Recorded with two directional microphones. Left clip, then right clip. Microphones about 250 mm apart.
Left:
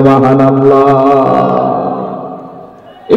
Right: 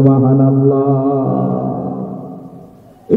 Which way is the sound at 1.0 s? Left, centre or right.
Left.